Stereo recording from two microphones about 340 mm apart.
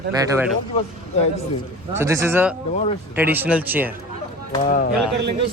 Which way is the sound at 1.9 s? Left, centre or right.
Centre.